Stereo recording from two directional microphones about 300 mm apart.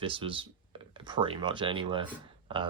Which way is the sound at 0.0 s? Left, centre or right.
Centre.